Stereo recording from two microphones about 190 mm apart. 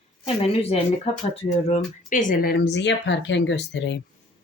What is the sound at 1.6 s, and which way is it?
Speech, 40° left (ahead or behind).